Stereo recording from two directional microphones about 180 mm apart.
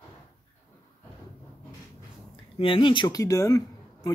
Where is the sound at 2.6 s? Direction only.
30° left (ahead or behind).